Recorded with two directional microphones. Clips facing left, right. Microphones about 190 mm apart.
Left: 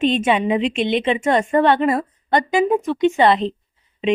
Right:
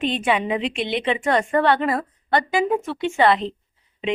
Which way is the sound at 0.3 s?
20° left (ahead or behind).